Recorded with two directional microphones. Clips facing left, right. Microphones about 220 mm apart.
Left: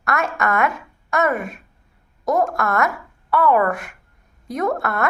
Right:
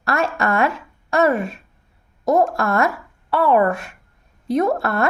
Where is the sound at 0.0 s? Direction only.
30° right (ahead or behind).